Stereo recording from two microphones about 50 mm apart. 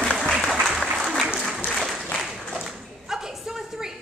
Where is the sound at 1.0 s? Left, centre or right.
Centre.